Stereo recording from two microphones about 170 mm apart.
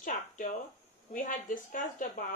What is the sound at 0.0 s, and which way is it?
Speech, 50° left (ahead or behind).